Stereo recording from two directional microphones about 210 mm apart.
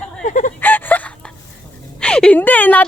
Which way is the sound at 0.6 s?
10° left (ahead or behind).